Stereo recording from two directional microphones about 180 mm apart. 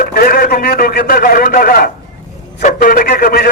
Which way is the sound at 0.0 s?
55° left (ahead or behind).